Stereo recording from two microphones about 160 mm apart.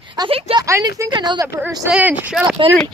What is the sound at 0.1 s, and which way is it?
Speech, 30° right (ahead or behind).